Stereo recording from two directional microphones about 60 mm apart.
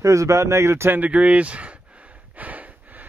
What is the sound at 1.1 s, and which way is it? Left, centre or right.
Speech, centre.